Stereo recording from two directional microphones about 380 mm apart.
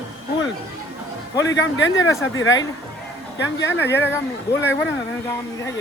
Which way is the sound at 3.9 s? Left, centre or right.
Centre.